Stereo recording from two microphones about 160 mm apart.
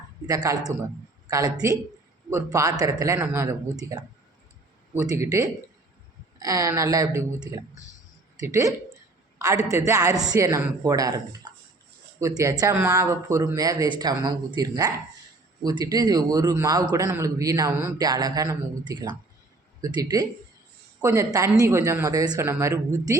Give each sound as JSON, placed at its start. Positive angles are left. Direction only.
{"t": 0.3, "sound": "a man's voice", "side_deg": -20}